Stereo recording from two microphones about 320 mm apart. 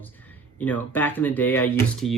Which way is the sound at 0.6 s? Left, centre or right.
Centre.